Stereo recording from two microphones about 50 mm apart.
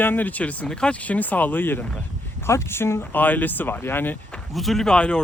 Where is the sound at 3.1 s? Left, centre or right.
Left.